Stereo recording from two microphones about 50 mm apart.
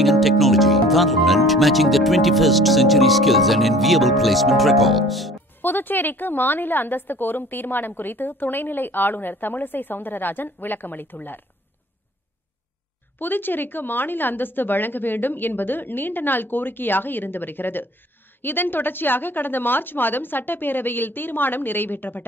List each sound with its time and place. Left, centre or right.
0.0 s speech: centre
5.6 s a woman's voice: left
13.2 s a woman's voice: left